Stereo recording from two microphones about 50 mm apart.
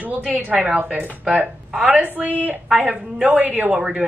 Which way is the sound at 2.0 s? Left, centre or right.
Right.